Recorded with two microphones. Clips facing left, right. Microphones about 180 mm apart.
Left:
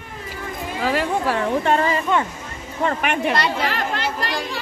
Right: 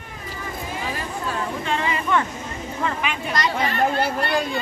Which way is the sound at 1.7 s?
45° left (ahead or behind).